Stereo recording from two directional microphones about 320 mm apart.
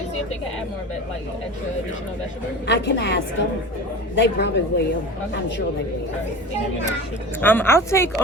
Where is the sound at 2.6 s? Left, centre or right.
Left.